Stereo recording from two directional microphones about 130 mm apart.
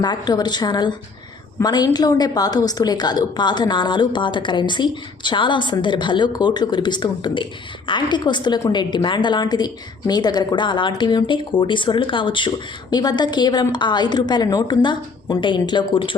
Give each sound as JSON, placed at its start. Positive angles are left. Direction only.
{"t": 0.0, "sound": "a woman's voice", "side_deg": 35}